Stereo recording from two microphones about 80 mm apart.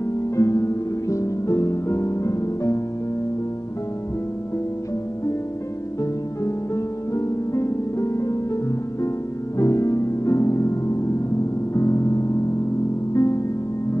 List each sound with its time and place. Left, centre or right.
0.4 s music: left
6.4 s music: left
9.6 s music: left